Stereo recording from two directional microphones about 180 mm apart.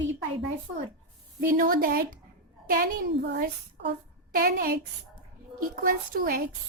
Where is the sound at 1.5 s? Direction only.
50° right (ahead or behind).